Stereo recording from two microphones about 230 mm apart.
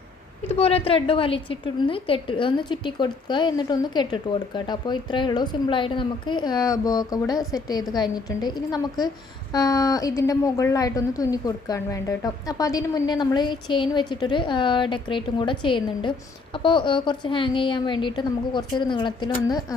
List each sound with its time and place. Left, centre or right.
0.4 s a woman's voice: left